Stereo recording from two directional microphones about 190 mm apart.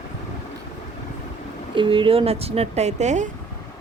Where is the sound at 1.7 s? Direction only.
25° right (ahead or behind).